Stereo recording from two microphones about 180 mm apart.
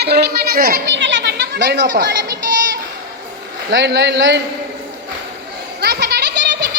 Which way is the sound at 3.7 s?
75° right (ahead or behind).